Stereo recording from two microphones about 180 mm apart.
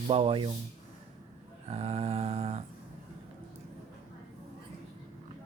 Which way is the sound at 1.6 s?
35° right (ahead or behind).